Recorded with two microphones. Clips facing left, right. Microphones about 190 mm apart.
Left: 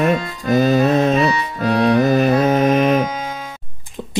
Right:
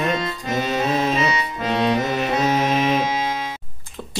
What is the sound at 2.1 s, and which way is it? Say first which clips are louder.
Music: left 8 dB; 45° left (ahead or behind).